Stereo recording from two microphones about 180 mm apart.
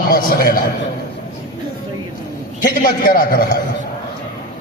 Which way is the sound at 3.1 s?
55° left (ahead or behind).